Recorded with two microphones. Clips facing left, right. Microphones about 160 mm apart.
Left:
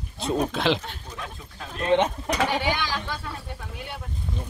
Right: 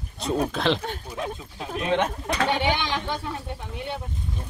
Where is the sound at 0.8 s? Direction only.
50° right (ahead or behind).